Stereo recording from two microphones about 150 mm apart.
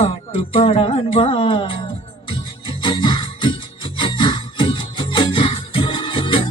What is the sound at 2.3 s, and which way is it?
Music, 35° left (ahead or behind).